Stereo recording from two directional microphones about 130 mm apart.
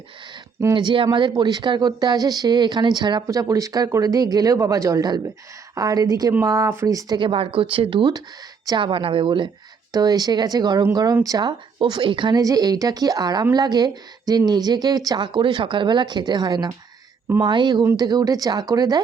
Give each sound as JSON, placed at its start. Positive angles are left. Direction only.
{"t": 0.7, "sound": "speech", "side_deg": -35}
{"t": 7.2, "sound": "speech", "side_deg": -40}